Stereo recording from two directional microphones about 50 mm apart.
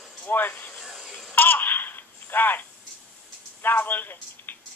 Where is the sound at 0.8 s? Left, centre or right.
Centre.